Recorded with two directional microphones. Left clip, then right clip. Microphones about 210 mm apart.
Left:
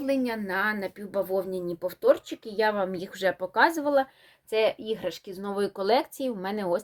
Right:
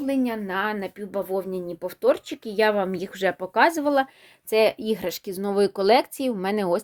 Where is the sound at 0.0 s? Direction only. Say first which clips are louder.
Right 2 dB; 30° right (ahead or behind).